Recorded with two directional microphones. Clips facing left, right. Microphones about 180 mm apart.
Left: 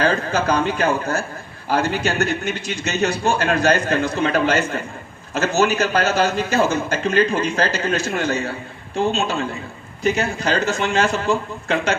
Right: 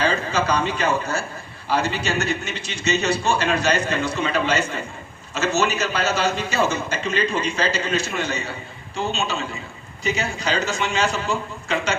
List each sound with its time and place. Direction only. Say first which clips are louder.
0.0 s a man's voice: left 3 dB; 50° left (ahead or behind)